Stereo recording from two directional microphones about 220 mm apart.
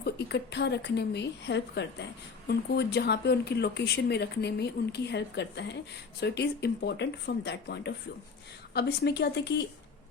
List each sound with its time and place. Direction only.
0.0 s speech: 50° left (ahead or behind)